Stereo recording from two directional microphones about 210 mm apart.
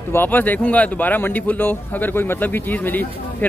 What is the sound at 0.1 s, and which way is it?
Speech, 10° left (ahead or behind).